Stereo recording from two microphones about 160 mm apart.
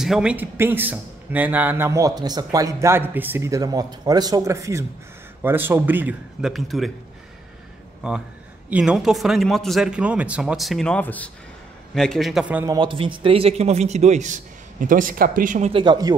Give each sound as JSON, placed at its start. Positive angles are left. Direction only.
{"t": 0.0, "sound": "a man's voice", "side_deg": -5}
{"t": 6.5, "sound": "speech", "side_deg": 0}
{"t": 8.6, "sound": "speech", "side_deg": -5}
{"t": 12.6, "sound": "a man's voice", "side_deg": -30}
{"t": 15.7, "sound": "speech", "side_deg": -30}